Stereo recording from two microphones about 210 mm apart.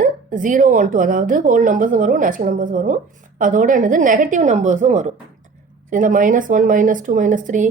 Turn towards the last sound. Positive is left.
turn(degrees=-35)  # may be behind; listen again after turning